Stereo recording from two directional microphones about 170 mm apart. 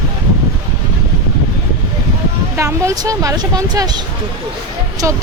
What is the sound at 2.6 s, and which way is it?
Speech, 15° right (ahead or behind).